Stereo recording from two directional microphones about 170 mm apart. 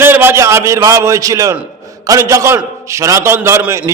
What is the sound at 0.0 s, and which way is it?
A man's voice, 15° right (ahead or behind).